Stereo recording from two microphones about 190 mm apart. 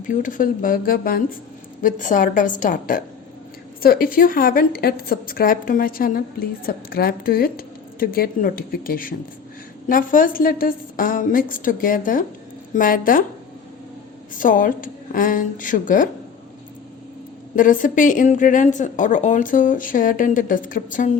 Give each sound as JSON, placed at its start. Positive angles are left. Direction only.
{"t": 0.1, "sound": "a woman's voice", "side_deg": 45}
{"t": 14.3, "sound": "a woman's voice", "side_deg": 45}
{"t": 17.5, "sound": "a woman's voice", "side_deg": 45}